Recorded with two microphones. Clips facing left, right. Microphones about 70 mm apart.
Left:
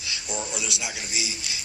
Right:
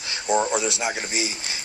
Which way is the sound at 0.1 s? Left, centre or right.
Right.